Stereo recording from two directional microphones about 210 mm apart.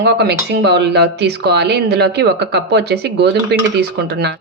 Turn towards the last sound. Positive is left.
turn(degrees=-50)  # may be behind; listen again after turning